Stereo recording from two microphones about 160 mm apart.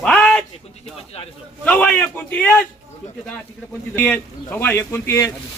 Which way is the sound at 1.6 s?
5° left (ahead or behind).